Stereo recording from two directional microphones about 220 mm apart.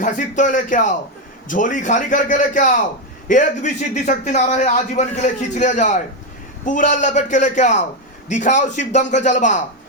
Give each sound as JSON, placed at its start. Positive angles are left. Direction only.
{"t": 0.0, "sound": "a man's voice", "side_deg": 35}